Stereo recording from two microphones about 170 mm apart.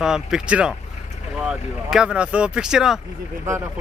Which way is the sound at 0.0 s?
5° right (ahead or behind).